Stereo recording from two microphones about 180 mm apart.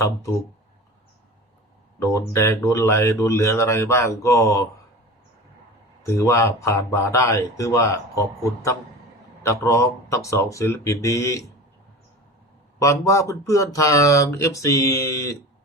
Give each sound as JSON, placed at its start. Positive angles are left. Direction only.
{"t": 2.0, "sound": "speech", "side_deg": 15}
{"t": 6.0, "sound": "speech", "side_deg": 15}
{"t": 9.4, "sound": "speech", "side_deg": 15}
{"t": 12.8, "sound": "speech", "side_deg": 15}